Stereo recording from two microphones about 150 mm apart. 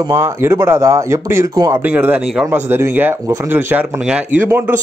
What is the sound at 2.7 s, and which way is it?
A man's voice, 15° right (ahead or behind).